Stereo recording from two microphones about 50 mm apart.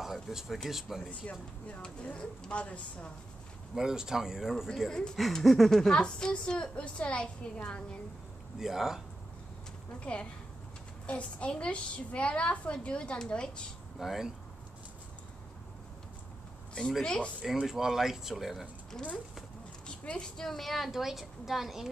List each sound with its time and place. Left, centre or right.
0.0 s a sound: centre
0.7 s a woman's voice: centre
2.1 s a woman's voice: centre
3.7 s speech: centre
4.8 s speech: centre
5.1 s a woman's voice: centre
5.7 s a woman's voice: centre
8.5 s speech: centre
9.9 s a woman's voice: left
13.9 s a woman's voice: centre
16.8 s a woman's voice: centre
17.4 s speech: centre
20.1 s a woman's voice: centre
20.4 s a woman's voice: centre